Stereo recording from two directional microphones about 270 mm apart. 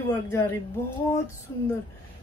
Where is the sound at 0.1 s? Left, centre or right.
Centre.